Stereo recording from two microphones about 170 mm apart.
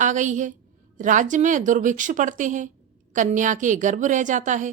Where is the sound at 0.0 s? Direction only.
45° right (ahead or behind).